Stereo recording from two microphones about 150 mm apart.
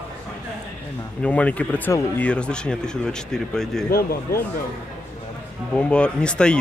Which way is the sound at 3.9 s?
90° left.